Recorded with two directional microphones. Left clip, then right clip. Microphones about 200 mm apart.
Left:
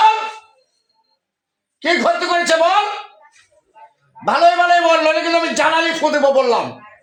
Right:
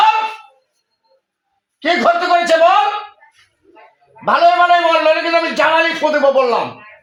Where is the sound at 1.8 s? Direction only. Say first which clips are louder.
Right 2 dB; 20° left (ahead or behind).